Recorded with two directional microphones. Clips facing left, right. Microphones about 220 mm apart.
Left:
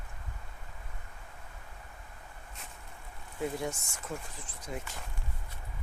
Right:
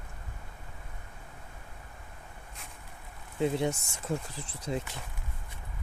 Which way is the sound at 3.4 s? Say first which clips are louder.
Right 6 dB; 25° right (ahead or behind).